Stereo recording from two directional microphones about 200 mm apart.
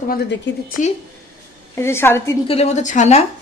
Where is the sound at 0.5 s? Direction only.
60° left (ahead or behind).